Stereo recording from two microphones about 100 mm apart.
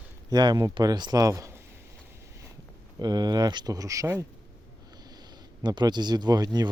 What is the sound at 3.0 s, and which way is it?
Speech, 45° right (ahead or behind).